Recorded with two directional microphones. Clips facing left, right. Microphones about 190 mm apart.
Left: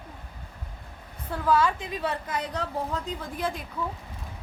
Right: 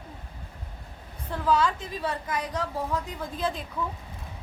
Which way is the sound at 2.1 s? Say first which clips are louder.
Even; 25° left (ahead or behind).